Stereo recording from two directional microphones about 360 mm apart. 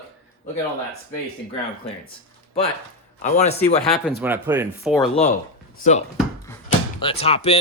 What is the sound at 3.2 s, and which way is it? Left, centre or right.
Speech, centre.